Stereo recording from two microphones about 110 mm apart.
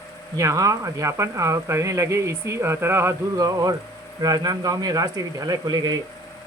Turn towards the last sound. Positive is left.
turn(degrees=-35)  # may be behind; listen again after turning